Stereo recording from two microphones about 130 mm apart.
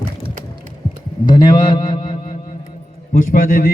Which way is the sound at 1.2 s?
35° left (ahead or behind).